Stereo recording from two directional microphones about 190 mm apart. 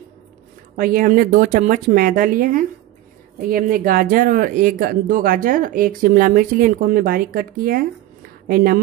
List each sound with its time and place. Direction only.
0.7 s speech: 50° right (ahead or behind)